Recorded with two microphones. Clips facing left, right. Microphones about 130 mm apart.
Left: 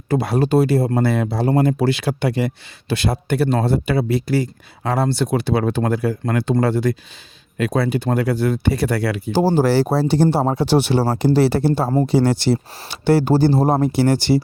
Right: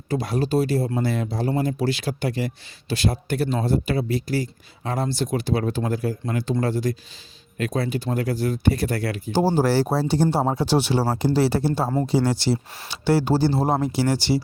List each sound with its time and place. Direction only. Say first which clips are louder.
0.1 s speech: left 5 dB; 65° left (ahead or behind)